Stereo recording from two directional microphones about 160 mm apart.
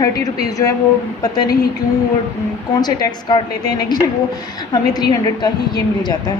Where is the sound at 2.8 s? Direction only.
25° left (ahead or behind).